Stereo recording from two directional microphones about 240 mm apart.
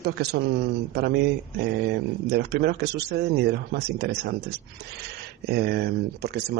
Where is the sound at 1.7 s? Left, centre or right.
Right.